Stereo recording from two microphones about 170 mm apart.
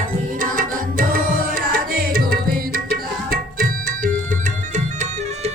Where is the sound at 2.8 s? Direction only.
60° right (ahead or behind).